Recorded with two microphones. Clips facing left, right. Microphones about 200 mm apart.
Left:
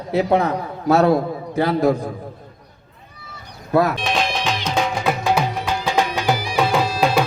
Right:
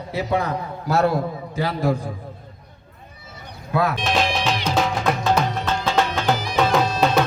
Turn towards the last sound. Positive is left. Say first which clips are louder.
# even
turn(degrees=10)  # may be behind; listen again after turning